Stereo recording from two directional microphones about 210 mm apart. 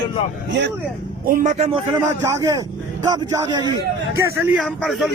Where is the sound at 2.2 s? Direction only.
15° right (ahead or behind).